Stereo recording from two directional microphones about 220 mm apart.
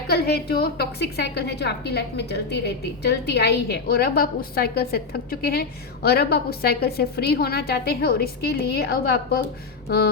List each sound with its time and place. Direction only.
0.1 s a woman's voice: 45° left (ahead or behind)